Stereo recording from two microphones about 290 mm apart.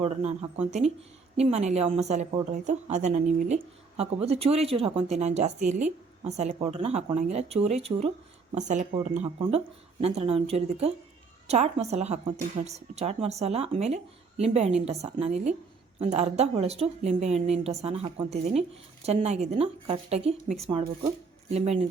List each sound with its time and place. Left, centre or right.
0.0 s a woman's voice: right